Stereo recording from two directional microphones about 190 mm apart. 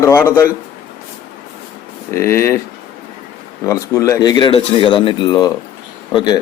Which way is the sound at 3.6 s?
15° left (ahead or behind).